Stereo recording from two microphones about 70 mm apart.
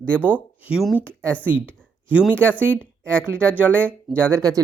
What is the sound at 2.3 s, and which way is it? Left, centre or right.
Speech, centre.